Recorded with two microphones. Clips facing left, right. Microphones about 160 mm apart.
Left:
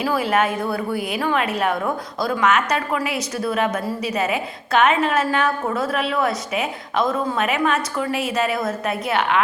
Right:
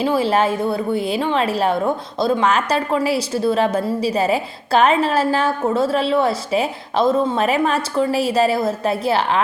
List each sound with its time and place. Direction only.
0.0 s a woman's voice: 30° right (ahead or behind)